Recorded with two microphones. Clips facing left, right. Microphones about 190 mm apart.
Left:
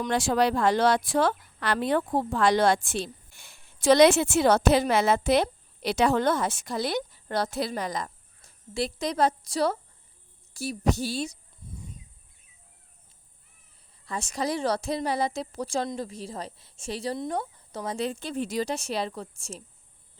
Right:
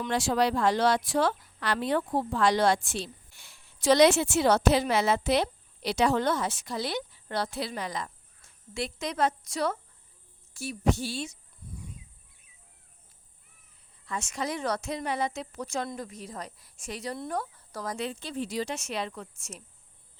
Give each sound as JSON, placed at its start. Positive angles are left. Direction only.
{"t": 0.1, "sound": "a woman's voice", "side_deg": 50}
{"t": 14.0, "sound": "a woman's voice", "side_deg": 35}
{"t": 17.9, "sound": "a woman's voice", "side_deg": 45}